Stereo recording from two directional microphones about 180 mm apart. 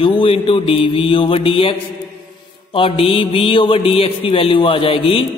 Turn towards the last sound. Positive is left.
turn(degrees=30)  # may be behind; listen again after turning